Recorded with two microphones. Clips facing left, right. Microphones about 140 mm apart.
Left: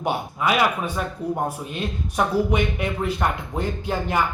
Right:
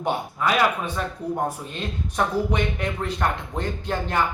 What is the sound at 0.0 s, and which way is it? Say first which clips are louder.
Speech: left 1 dB; 10° left (ahead or behind).